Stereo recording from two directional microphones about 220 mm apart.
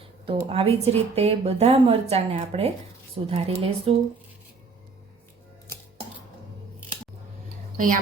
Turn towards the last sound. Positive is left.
turn(degrees=-35)  # may be behind; listen again after turning